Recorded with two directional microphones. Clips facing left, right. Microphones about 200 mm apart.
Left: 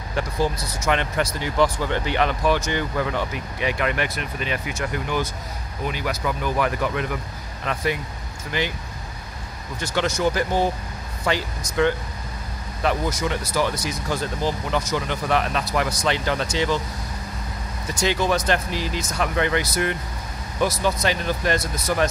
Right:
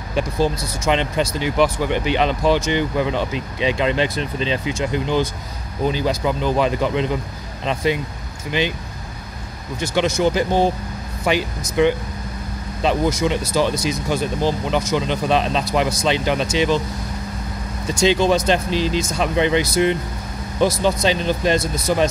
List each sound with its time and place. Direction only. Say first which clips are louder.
0.1 s speech: right 4 dB; 20° right (ahead or behind)
9.9 s speech: right 4 dB; 10° right (ahead or behind)
10.2 s speech: right 3 dB; 20° right (ahead or behind)
12.8 s speech: right 5 dB; 20° right (ahead or behind)
18.0 s speech: right 5 dB; 25° right (ahead or behind)